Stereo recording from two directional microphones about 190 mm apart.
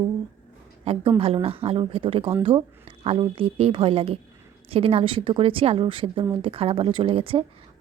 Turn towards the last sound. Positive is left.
turn(degrees=-30)  # may be behind; listen again after turning